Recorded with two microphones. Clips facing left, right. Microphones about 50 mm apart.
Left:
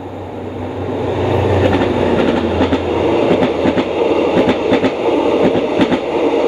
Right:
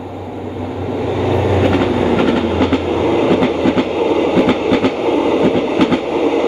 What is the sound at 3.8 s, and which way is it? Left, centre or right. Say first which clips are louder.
Train: left 1 dB; left.